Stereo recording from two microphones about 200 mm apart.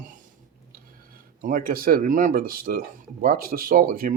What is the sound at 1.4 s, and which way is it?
Speech, 45° right (ahead or behind).